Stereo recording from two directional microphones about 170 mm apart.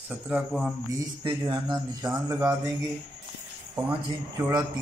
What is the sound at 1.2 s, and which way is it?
Mantra, 25° right (ahead or behind).